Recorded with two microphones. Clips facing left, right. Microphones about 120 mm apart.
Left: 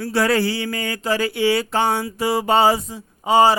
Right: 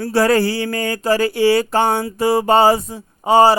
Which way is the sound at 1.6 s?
50° right (ahead or behind).